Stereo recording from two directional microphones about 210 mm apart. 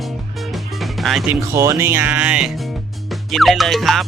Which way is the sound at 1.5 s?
15° right (ahead or behind).